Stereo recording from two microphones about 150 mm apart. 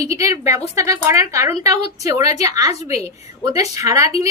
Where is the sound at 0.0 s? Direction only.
20° right (ahead or behind).